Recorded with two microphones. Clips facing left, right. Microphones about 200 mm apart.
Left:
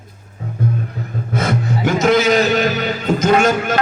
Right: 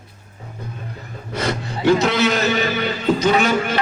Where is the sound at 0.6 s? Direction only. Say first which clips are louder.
Left 14 dB; 55° left (ahead or behind).